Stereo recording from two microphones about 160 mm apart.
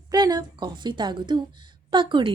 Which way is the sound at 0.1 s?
25° right (ahead or behind).